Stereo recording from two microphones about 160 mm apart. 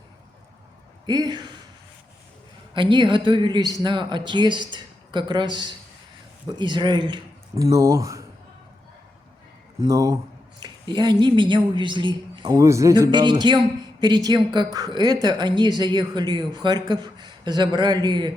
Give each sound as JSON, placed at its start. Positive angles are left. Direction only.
{"t": 1.0, "sound": "a woman's voice", "side_deg": -25}
{"t": 2.7, "sound": "a woman's voice", "side_deg": -30}
{"t": 9.8, "sound": "a woman's voice", "side_deg": -20}